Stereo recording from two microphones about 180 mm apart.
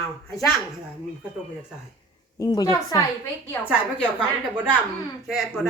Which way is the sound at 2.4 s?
20° left (ahead or behind).